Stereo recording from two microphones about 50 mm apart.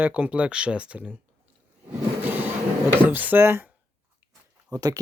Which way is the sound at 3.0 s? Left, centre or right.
Right.